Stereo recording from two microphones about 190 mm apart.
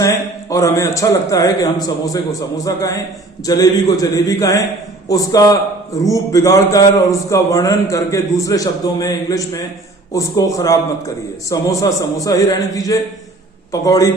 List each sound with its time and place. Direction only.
0.0 s a man's voice: 15° left (ahead or behind)